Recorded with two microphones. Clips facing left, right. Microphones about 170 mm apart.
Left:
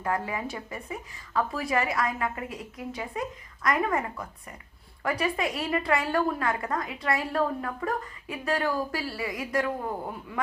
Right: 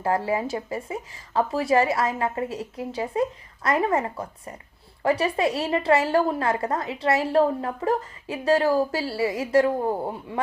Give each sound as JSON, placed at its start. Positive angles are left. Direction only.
{"t": 0.0, "sound": "a woman's voice", "side_deg": -30}